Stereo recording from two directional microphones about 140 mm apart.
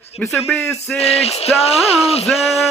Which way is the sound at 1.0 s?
45° left (ahead or behind).